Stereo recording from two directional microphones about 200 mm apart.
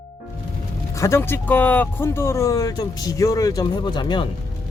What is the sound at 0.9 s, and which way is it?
Speech, 15° left (ahead or behind).